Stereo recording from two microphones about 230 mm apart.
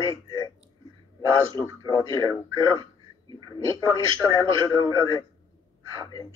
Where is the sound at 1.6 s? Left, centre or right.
Centre.